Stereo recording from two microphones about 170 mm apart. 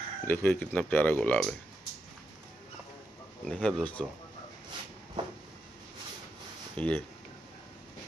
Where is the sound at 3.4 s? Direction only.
Centre (ahead or behind).